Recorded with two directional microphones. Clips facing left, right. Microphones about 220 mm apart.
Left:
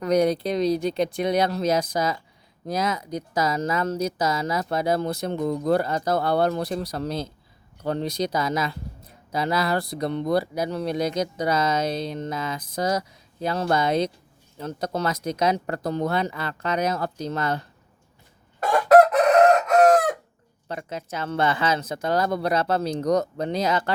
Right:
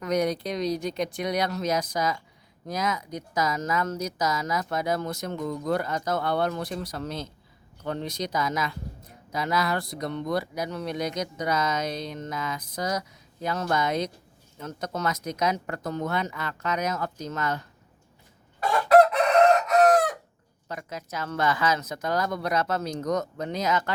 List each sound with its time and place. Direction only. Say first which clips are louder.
0.0 s speech: left 5 dB; 30° left (ahead or behind)
20.7 s speech: left 4 dB; 30° left (ahead or behind)